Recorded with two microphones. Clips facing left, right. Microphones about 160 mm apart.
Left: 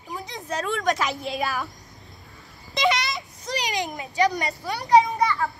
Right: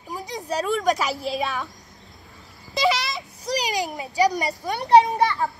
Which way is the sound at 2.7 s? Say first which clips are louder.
Right 1 dB; centre (ahead or behind).